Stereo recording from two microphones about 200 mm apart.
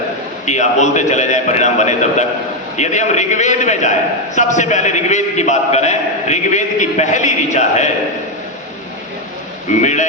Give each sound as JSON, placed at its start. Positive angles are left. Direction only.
{"t": 0.4, "sound": "a man's voice", "side_deg": 35}
{"t": 9.8, "sound": "a man's voice", "side_deg": 35}